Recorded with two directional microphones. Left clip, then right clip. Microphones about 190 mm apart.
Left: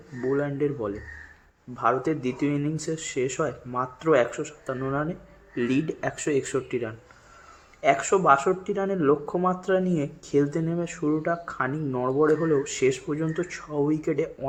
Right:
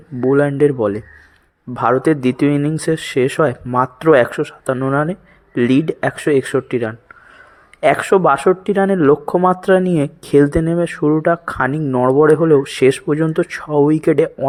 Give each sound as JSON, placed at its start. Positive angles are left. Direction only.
{"t": 0.2, "sound": "speech", "side_deg": -45}